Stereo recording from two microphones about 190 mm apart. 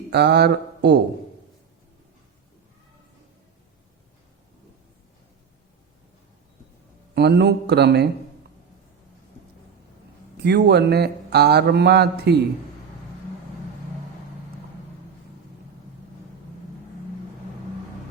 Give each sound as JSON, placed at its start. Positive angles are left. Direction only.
{"t": 0.1, "sound": "speech", "side_deg": -60}
{"t": 7.1, "sound": "a man's voice", "side_deg": -60}
{"t": 10.3, "sound": "a man's voice", "side_deg": -60}